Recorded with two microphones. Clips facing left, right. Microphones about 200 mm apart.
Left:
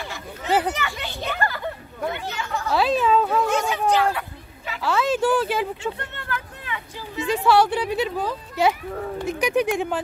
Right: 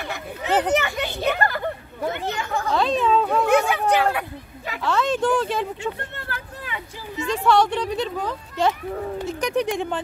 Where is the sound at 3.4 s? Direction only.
60° right (ahead or behind).